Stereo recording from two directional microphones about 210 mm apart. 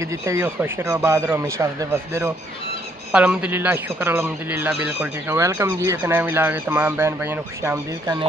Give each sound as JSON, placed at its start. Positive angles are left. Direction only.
{"t": 0.3, "sound": "a man's voice", "side_deg": -15}